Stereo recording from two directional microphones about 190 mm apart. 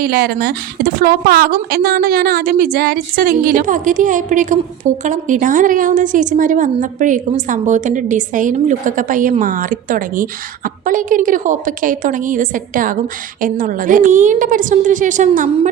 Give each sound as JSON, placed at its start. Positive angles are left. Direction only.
{"t": 0.0, "sound": "a woman's voice", "side_deg": -50}